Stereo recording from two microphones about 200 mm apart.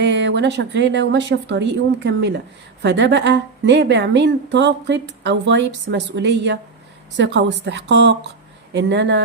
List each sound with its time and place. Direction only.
0.0 s a woman's voice: 65° right (ahead or behind)